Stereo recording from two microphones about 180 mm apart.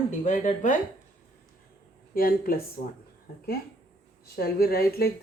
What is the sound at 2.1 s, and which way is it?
Speech, 55° left (ahead or behind).